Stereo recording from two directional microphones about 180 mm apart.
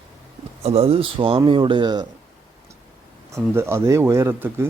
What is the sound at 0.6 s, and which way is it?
A man's voice, 35° right (ahead or behind).